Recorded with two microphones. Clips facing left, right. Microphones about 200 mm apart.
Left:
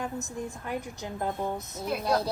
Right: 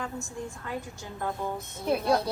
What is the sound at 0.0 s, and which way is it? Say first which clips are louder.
A woman's voice: left 2 dB; 20° left (ahead or behind).